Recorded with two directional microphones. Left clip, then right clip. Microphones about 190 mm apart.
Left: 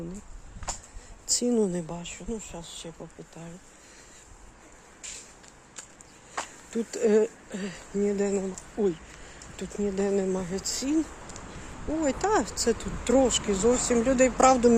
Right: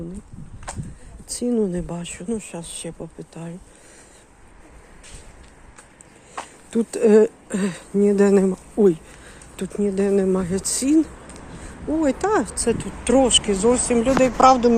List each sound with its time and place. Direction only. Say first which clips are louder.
0.7 s a sound: right 2 dB; 15° right (ahead or behind)
1.3 s speech: right 3 dB; centre (ahead or behind)
1.9 s speech: right 7 dB; 25° right (ahead or behind)
6.7 s speech: right 8 dB; 25° right (ahead or behind)
7.5 s speech: right 9 dB; 35° right (ahead or behind)
9.6 s speech: right 7 dB; 20° right (ahead or behind)
12.0 s speech: right 4 dB; 15° right (ahead or behind); by 14.1 s centre (ahead or behind)
14.2 s speech: right 6 dB; 15° left (ahead or behind)